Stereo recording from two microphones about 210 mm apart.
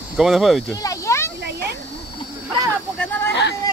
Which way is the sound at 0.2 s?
Centre (ahead or behind).